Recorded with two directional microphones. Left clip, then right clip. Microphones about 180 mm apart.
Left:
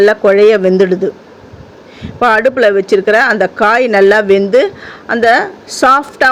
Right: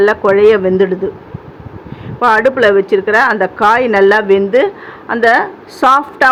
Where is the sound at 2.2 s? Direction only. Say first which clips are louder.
Left 1 dB; 20° left (ahead or behind).